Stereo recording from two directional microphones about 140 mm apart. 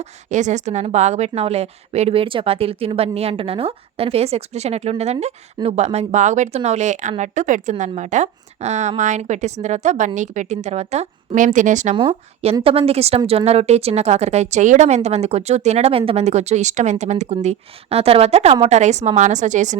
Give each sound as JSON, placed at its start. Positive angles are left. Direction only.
{"t": 0.3, "sound": "a woman's voice", "side_deg": -60}
{"t": 11.9, "sound": "a woman's voice", "side_deg": -45}